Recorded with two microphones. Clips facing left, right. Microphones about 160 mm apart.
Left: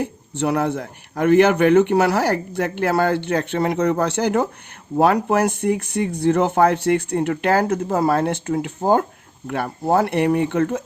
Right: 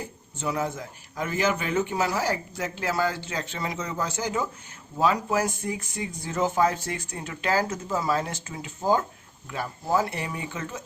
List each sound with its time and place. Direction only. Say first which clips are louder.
0.0 s speech: left 10 dB; 65° left (ahead or behind)